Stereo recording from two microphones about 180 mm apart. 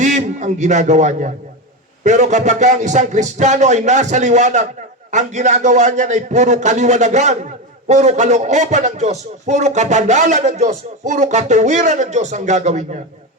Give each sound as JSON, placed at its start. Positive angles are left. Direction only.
{"t": 0.0, "sound": "a man's voice", "side_deg": -40}